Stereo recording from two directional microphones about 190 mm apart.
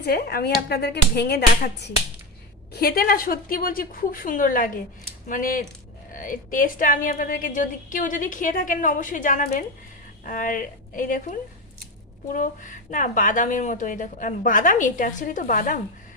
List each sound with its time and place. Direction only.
0.0 s a woman's voice: 55° left (ahead or behind)